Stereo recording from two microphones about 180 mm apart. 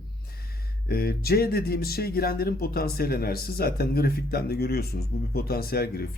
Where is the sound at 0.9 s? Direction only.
60° left (ahead or behind).